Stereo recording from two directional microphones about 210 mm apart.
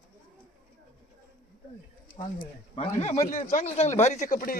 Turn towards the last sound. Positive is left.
turn(degrees=40)  # may be behind; listen again after turning